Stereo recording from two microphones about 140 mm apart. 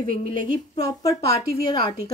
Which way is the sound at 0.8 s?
25° left (ahead or behind).